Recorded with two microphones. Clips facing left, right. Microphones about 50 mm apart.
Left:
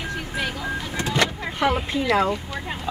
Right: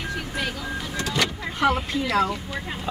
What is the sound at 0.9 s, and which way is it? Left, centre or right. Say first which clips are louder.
Vehicle: left 3 dB; left.